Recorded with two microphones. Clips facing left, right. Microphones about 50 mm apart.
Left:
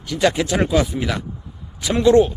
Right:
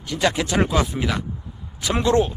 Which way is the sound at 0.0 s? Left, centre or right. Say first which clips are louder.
Left 3 dB; centre.